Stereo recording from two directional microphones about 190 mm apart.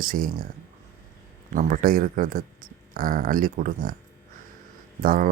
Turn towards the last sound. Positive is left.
turn(degrees=-45)  # may be behind; listen again after turning